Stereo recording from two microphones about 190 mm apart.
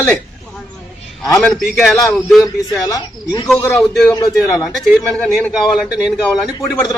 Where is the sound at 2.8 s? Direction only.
20° left (ahead or behind).